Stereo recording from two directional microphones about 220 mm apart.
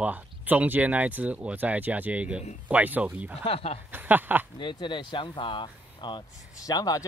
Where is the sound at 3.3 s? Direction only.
25° left (ahead or behind).